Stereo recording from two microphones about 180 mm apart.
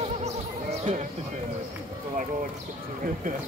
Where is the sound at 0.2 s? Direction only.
35° right (ahead or behind).